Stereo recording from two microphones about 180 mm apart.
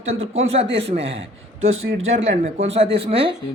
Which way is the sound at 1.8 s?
85° right.